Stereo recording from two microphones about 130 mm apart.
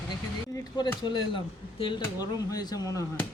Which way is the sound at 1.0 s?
40° left (ahead or behind).